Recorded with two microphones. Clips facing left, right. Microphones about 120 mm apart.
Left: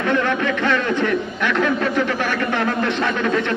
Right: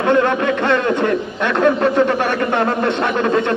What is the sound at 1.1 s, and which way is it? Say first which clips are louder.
A man's voice: right 2 dB; 30° right (ahead or behind).